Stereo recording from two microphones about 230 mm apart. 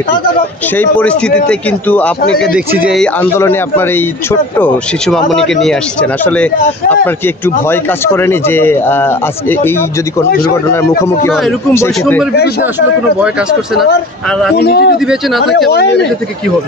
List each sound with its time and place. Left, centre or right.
0.7 s a man's voice: centre
14.6 s speech: left